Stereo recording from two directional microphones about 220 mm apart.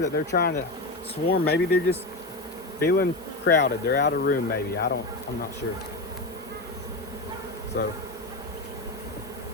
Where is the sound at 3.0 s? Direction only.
45° left (ahead or behind).